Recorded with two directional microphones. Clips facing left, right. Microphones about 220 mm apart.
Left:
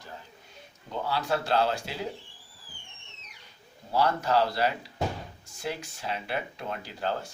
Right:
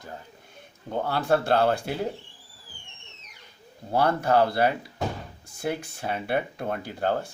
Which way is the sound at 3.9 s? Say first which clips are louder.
Right 3 dB; 55° right (ahead or behind).